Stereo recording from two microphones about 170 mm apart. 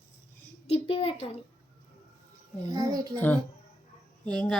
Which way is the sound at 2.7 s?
20° right (ahead or behind).